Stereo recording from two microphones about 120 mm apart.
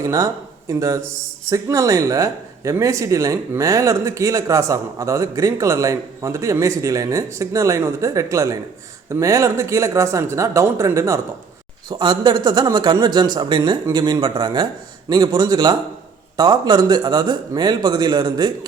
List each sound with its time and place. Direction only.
0.0 s speech: 30° right (ahead or behind)
11.9 s speech: 40° right (ahead or behind)